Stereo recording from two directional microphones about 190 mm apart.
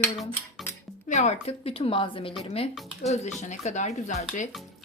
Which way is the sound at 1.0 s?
40° left (ahead or behind).